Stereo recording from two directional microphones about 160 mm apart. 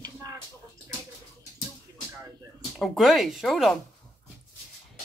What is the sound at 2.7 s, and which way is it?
Speech, centre (ahead or behind).